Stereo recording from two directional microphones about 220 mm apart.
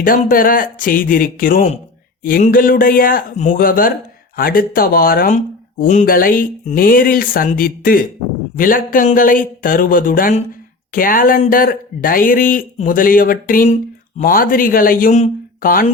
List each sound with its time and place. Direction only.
0.0 s speech: 40° left (ahead or behind)